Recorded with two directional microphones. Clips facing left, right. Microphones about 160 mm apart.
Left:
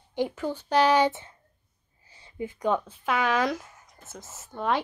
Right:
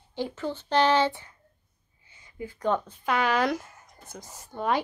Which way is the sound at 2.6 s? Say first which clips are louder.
Even; 5° left (ahead or behind).